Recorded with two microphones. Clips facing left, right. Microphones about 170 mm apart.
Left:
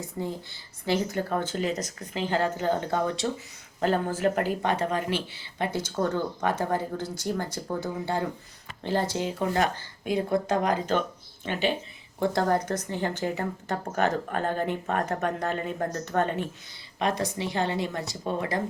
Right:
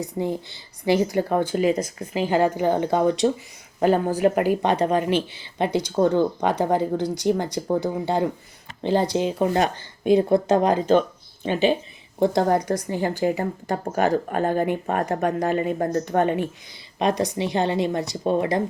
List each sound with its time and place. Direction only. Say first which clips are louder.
0.2 s speech: right 6 dB; 15° right (ahead or behind)